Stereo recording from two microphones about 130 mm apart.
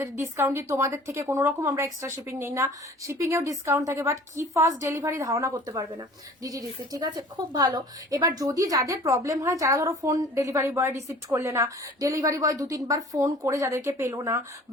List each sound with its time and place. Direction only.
0.0 s a woman's voice: 20° right (ahead or behind)